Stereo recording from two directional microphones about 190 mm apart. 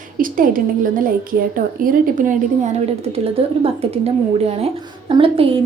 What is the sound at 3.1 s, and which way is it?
A woman's voice, 30° right (ahead or behind).